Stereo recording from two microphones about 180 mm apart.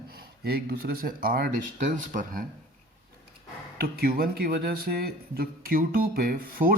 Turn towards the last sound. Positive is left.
turn(degrees=-55)  # may be behind; listen again after turning